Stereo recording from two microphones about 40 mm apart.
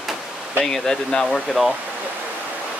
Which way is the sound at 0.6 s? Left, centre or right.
Centre.